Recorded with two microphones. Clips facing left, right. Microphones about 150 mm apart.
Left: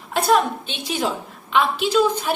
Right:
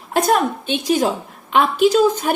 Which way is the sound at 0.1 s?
50° right (ahead or behind).